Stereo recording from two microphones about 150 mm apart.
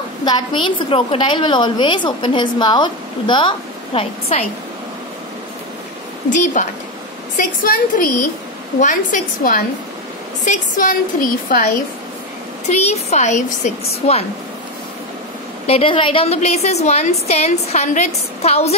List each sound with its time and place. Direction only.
0.2 s a woman's voice: 30° left (ahead or behind)
6.3 s a woman's voice: 55° left (ahead or behind)
7.3 s a woman's voice: 70° left (ahead or behind)
12.6 s a woman's voice: 45° left (ahead or behind)
15.6 s a woman's voice: 40° left (ahead or behind)